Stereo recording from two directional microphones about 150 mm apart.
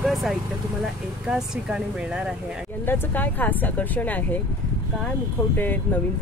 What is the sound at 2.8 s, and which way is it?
Speech, 15° left (ahead or behind).